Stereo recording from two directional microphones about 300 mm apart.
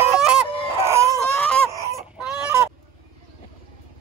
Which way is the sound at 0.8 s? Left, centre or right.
Centre.